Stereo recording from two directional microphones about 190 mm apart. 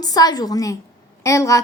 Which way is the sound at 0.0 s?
20° left (ahead or behind).